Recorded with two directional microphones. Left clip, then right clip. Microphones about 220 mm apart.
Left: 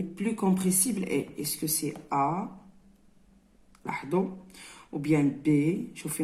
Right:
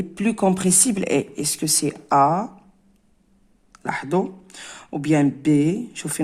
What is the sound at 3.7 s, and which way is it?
Speech, 45° right (ahead or behind).